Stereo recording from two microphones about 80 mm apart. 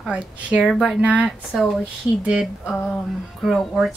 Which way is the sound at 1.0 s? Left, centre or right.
Centre.